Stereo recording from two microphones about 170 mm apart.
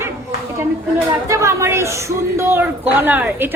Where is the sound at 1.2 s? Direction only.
20° right (ahead or behind).